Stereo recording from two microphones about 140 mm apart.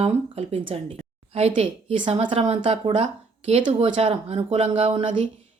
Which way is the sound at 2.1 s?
45° right (ahead or behind).